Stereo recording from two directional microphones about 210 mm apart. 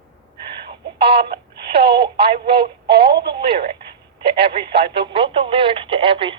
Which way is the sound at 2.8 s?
50° right (ahead or behind).